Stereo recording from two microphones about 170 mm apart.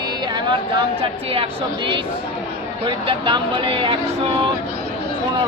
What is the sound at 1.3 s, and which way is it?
Speech, 30° right (ahead or behind).